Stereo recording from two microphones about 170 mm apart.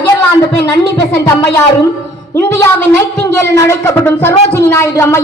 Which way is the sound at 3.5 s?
15° left (ahead or behind).